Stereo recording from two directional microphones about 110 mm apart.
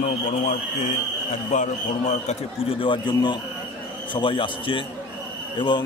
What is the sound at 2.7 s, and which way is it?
A man's voice, 50° left (ahead or behind).